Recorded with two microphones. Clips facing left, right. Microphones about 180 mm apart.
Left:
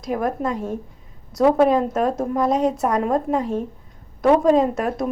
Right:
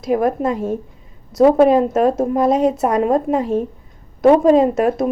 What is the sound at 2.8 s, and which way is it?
Speech, 20° right (ahead or behind).